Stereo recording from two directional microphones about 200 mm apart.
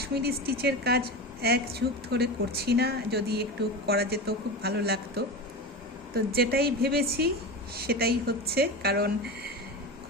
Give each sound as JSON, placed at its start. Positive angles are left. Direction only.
{"t": 0.0, "sound": "a woman's voice", "side_deg": -50}